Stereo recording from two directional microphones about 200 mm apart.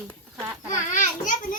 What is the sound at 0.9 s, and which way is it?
Speech, 40° left (ahead or behind).